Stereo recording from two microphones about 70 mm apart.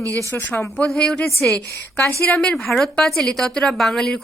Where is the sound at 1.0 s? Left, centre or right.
Centre.